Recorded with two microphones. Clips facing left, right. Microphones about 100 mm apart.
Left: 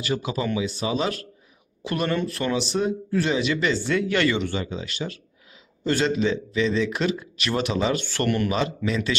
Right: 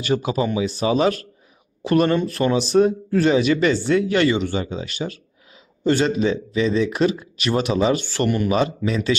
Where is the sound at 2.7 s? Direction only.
40° right (ahead or behind).